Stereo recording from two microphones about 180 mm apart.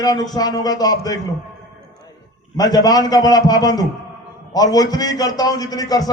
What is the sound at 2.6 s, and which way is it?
A man's voice, 20° left (ahead or behind).